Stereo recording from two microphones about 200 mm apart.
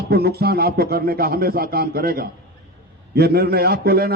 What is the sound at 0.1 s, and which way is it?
A man's voice, 50° right (ahead or behind).